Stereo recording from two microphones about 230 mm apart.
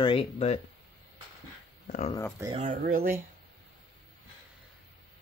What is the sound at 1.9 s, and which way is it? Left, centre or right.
Speech, left.